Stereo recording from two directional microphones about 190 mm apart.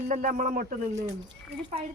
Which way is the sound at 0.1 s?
45° right (ahead or behind).